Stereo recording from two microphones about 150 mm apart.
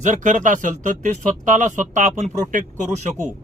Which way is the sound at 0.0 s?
55° right (ahead or behind).